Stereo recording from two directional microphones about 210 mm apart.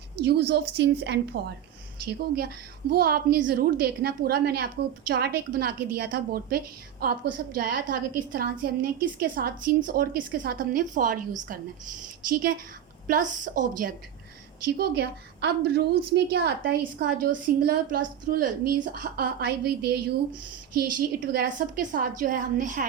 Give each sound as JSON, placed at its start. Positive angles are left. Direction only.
{"t": 0.3, "sound": "a woman's voice", "side_deg": -50}
{"t": 13.1, "sound": "a woman's voice", "side_deg": -40}
{"t": 14.7, "sound": "a woman's voice", "side_deg": -50}